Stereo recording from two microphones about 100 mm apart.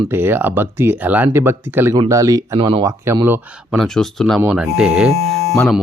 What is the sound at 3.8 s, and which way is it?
Speech, 5° left (ahead or behind).